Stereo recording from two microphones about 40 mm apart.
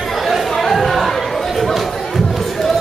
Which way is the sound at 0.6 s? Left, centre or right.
Centre.